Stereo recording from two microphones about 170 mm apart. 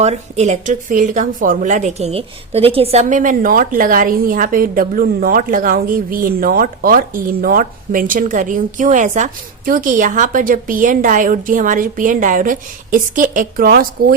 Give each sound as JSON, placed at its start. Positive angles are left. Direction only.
{"t": 0.0, "sound": "speech", "side_deg": -40}